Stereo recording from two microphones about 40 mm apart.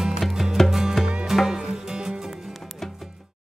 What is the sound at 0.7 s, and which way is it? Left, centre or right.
Music, centre.